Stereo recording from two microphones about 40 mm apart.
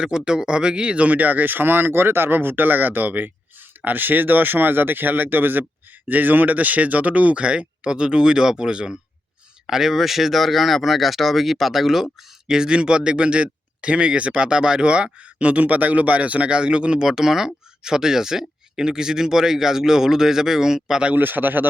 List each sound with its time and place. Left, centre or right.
0.3 s speech: right
9.6 s speech: centre
12.5 s speech: centre
15.4 s speech: right
17.1 s speech: centre
21.2 s speech: right